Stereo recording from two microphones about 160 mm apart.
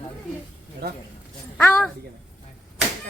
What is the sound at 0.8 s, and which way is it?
Speech, 90° right.